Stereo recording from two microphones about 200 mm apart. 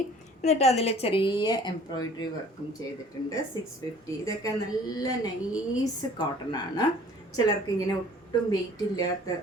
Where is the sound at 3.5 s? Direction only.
15° left (ahead or behind).